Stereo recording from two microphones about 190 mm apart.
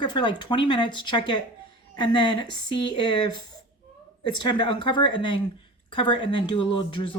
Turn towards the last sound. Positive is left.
turn(degrees=25)  # may be behind; listen again after turning